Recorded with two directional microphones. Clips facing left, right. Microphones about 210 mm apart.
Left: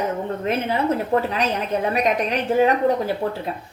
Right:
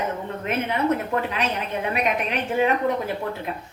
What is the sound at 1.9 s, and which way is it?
Speech, 40° left (ahead or behind).